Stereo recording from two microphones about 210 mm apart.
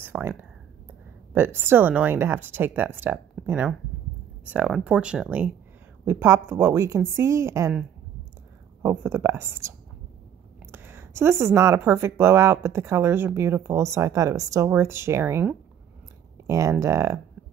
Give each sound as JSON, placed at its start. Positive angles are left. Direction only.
{"t": 0.0, "sound": "speech", "side_deg": -10}
{"t": 8.8, "sound": "speech", "side_deg": -10}